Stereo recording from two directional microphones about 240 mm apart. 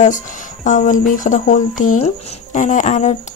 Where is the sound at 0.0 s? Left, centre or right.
Left.